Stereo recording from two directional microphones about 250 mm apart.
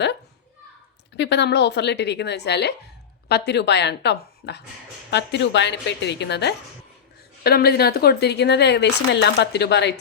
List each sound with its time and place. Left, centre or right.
1.1 s a woman's voice: left